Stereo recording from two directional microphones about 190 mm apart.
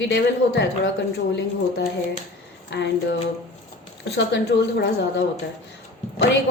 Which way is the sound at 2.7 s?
65° left (ahead or behind).